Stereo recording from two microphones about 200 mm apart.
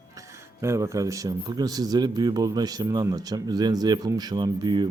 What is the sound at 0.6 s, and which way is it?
A man's voice, 15° right (ahead or behind).